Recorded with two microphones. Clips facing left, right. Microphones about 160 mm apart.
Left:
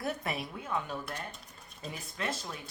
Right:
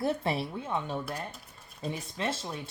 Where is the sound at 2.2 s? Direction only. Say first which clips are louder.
Right 3 dB; 30° right (ahead or behind).